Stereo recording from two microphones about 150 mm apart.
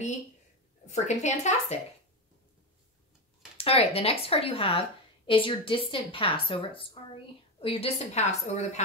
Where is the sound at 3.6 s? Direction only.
40° left (ahead or behind).